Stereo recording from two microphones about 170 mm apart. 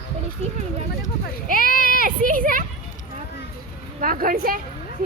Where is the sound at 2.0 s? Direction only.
55° right (ahead or behind).